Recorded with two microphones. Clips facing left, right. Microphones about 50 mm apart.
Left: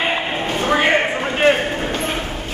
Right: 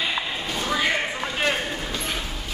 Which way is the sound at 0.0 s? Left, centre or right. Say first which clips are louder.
Left 7 dB; left.